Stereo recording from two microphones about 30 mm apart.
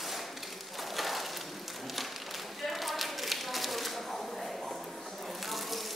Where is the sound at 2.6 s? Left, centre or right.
Centre.